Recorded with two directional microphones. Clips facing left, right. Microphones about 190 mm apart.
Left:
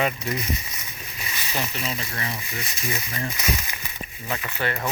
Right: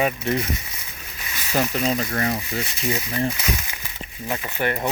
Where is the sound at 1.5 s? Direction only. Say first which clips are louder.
Right 8 dB; 45° right (ahead or behind).